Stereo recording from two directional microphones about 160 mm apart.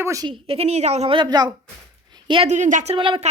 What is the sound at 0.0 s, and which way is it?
Speech, 20° right (ahead or behind).